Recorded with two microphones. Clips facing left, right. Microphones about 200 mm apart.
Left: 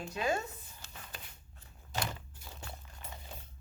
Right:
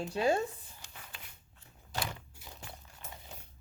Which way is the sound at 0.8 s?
15° right (ahead or behind).